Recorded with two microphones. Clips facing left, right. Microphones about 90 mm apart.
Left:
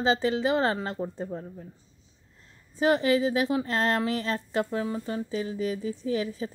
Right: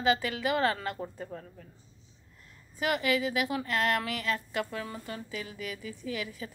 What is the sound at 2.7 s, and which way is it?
A woman's voice, 30° left (ahead or behind).